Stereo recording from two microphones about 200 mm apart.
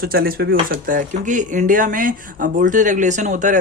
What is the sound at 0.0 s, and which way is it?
A man's voice, 50° right (ahead or behind).